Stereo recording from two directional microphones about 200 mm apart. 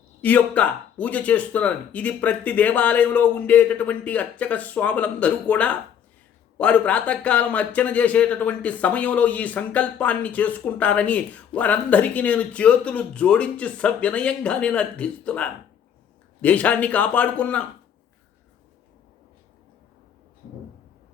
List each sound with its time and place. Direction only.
0.2 s a man's voice: 5° left (ahead or behind)